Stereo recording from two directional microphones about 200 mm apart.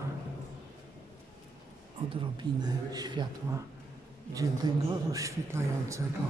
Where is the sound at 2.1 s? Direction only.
25° right (ahead or behind).